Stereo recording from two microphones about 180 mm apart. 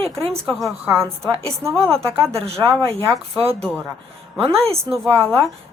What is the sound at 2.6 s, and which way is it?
Speech, 15° left (ahead or behind).